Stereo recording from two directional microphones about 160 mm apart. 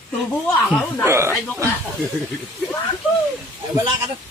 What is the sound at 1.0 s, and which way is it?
Speech, 15° right (ahead or behind).